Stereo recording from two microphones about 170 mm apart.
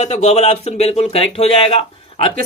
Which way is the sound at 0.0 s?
40° left (ahead or behind).